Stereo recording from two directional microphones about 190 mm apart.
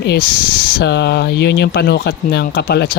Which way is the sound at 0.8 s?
65° left (ahead or behind).